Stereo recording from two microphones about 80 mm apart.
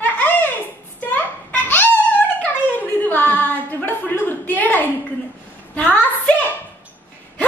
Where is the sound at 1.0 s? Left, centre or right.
Left.